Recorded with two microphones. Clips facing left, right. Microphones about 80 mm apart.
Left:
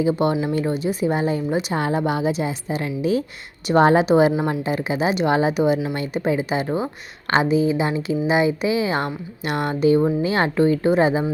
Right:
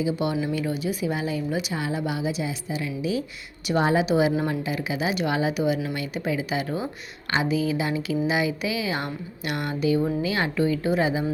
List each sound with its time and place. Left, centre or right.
0.0 s speech: left